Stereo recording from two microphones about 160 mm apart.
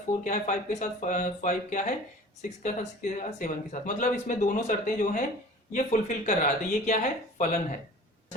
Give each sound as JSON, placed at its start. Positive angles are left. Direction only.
{"t": 0.3, "sound": "speech", "side_deg": 50}